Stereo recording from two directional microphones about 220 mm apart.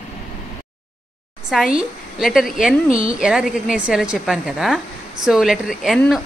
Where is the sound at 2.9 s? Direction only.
40° left (ahead or behind).